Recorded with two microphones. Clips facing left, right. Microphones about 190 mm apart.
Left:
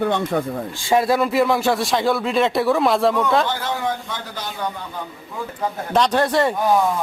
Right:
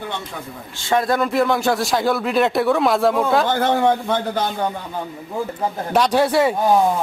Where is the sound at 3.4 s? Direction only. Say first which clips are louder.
Right 7 dB; 55° right (ahead or behind).